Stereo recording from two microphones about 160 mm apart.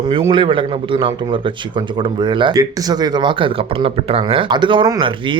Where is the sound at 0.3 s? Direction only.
30° right (ahead or behind).